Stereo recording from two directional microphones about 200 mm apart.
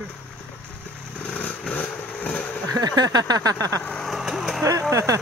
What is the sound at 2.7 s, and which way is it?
Speech, 20° right (ahead or behind).